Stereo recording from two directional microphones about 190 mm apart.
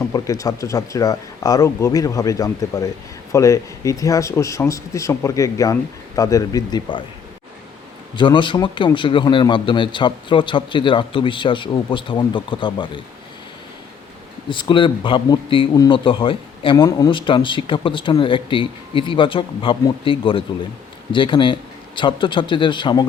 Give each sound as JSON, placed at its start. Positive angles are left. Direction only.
{"t": 0.0, "sound": "speech", "side_deg": 15}
{"t": 8.1, "sound": "speech", "side_deg": 25}
{"t": 14.5, "sound": "speech", "side_deg": 25}